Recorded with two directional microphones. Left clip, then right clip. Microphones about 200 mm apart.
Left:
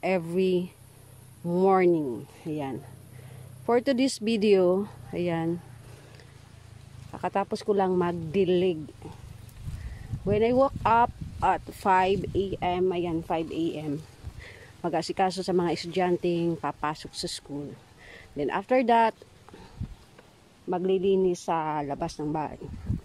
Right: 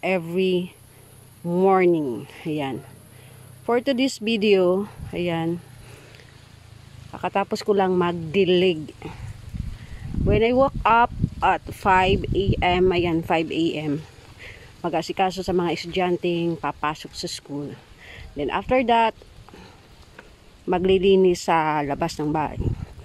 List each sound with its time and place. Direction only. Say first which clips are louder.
0.0 s speech: right 3 dB; centre (ahead or behind)
3.6 s speech: right 3 dB; centre (ahead or behind)
7.1 s speech: right 4 dB; centre (ahead or behind)
7.4 s speech: right 6 dB; 10° right (ahead or behind)
10.2 s speech: right 4 dB; 5° right (ahead or behind)
12.5 s speech: right 9 dB; 15° right (ahead or behind)
14.4 s speech: right 4 dB; centre (ahead or behind)
20.7 s speech: right 7 dB; 20° right (ahead or behind)